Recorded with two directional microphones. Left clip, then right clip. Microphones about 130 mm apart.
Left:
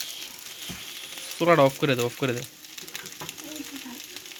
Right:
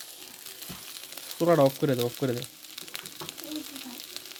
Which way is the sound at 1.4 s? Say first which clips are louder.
Left 3 dB; 15° right (ahead or behind).